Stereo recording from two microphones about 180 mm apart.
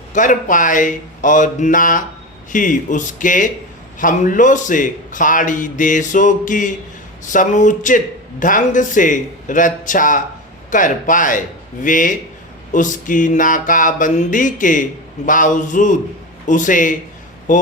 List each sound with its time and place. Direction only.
0.1 s a man's voice: 45° left (ahead or behind)